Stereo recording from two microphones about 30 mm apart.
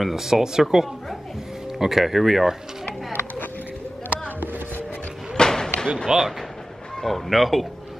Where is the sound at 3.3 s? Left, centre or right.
Left.